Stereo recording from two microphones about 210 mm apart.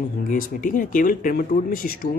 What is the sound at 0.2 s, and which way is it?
Speech, 40° left (ahead or behind).